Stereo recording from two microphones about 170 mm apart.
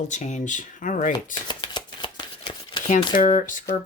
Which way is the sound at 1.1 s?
25° left (ahead or behind).